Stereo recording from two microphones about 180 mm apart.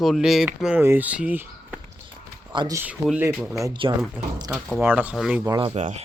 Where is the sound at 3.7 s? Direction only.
30° right (ahead or behind).